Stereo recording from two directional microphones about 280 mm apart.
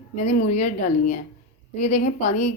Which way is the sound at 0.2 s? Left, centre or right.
Left.